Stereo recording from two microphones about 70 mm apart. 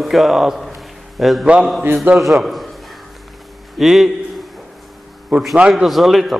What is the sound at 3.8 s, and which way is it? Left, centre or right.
Speech, centre.